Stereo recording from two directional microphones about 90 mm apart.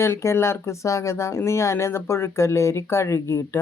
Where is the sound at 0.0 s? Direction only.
30° left (ahead or behind).